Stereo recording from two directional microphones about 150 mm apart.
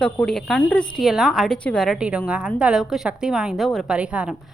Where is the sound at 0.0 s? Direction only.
5° left (ahead or behind).